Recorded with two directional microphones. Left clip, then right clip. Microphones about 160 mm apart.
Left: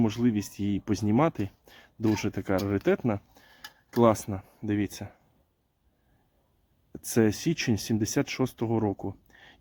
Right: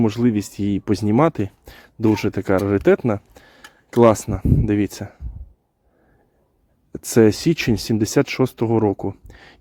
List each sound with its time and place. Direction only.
0.0 s speech: 35° right (ahead or behind)
6.9 s speech: 35° right (ahead or behind)